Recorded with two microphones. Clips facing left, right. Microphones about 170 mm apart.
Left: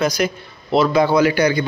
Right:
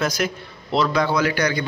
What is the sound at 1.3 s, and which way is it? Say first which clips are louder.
Speech: left 5 dB; 30° left (ahead or behind).